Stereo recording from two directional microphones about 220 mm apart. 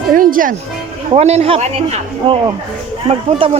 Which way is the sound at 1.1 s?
30° right (ahead or behind).